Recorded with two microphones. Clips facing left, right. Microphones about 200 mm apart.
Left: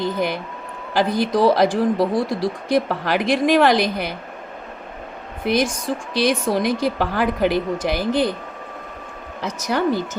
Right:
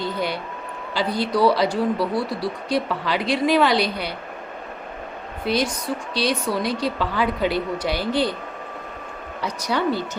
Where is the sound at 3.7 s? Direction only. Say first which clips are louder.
Left 3 dB; 45° left (ahead or behind).